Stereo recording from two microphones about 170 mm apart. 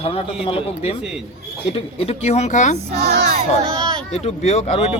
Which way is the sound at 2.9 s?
75° right (ahead or behind).